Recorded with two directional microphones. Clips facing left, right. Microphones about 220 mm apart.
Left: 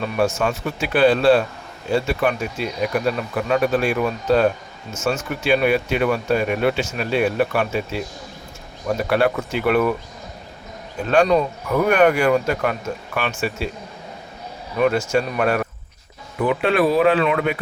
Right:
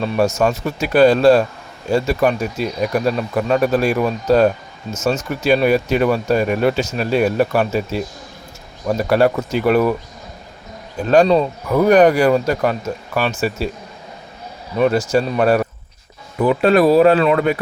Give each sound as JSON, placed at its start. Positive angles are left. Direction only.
{"t": 0.0, "sound": "speech", "side_deg": -40}
{"t": 9.0, "sound": "speech", "side_deg": -40}
{"t": 11.1, "sound": "speech", "side_deg": -35}
{"t": 14.8, "sound": "speech", "side_deg": -35}